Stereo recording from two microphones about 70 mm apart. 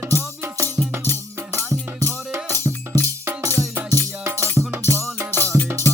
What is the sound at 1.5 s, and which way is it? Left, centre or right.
Music, right.